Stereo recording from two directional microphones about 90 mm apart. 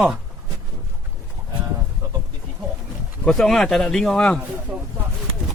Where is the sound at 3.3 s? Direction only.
5° left (ahead or behind).